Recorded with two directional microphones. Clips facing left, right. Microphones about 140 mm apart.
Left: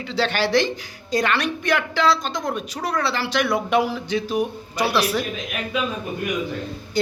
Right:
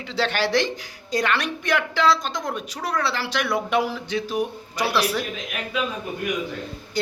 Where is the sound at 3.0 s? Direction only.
10° right (ahead or behind).